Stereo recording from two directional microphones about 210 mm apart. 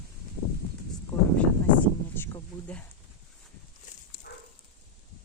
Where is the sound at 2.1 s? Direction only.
10° left (ahead or behind).